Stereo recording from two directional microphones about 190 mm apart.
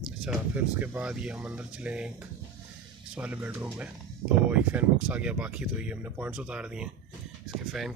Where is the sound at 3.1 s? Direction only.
5° right (ahead or behind).